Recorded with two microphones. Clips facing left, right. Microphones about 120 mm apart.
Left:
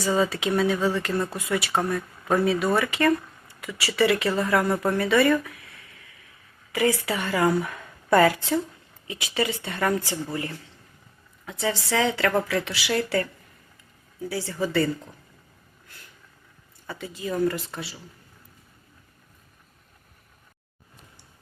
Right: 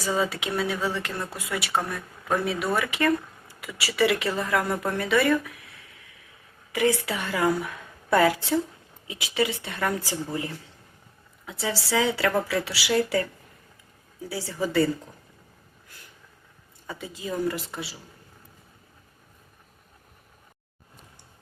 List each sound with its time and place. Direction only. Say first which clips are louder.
0.0 s a woman's voice: left 3 dB; 5° right (ahead or behind)
10.1 s speech: even; 15° right (ahead or behind)
11.6 s speech: left 1 dB; 5° right (ahead or behind)
14.3 s speech: left 1 dB; 10° right (ahead or behind)
16.8 s speech: left 2 dB; 15° right (ahead or behind)